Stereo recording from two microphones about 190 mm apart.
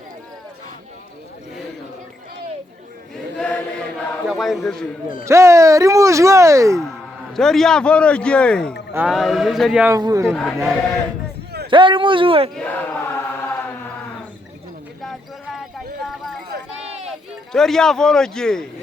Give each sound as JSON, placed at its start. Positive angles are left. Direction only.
{"t": 3.3, "sound": "chant", "side_deg": 5}
{"t": 4.3, "sound": "a man's voice", "side_deg": 0}
{"t": 5.2, "sound": "speech", "side_deg": -15}
{"t": 7.3, "sound": "a man's voice", "side_deg": 0}
{"t": 8.9, "sound": "a man's voice", "side_deg": -5}
{"t": 9.8, "sound": "speech", "side_deg": -15}
{"t": 10.2, "sound": "a man's voice", "side_deg": 5}
{"t": 11.7, "sound": "a man's voice", "side_deg": -25}
{"t": 12.5, "sound": "chant", "side_deg": 10}
{"t": 15.0, "sound": "clip-clop", "side_deg": 0}
{"t": 17.1, "sound": "speech", "side_deg": 0}